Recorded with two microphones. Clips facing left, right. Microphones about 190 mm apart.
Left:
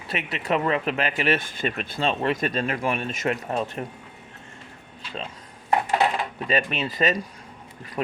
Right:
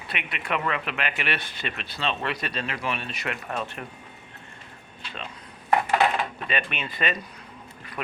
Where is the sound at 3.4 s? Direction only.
35° left (ahead or behind).